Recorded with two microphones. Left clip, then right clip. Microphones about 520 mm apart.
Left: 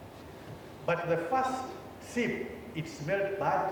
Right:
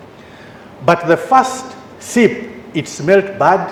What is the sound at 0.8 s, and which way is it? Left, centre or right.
A man's voice, right.